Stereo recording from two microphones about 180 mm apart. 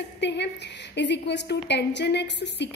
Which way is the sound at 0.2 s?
75° left (ahead or behind).